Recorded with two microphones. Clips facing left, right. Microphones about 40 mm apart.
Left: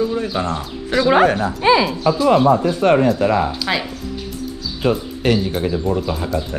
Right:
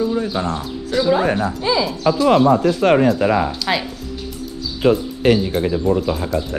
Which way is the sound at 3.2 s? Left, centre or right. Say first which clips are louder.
Even; centre.